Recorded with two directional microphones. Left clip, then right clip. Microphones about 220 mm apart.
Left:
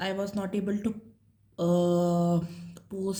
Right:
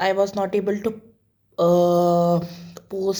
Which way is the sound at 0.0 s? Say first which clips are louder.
Right 12 dB; 15° left (ahead or behind).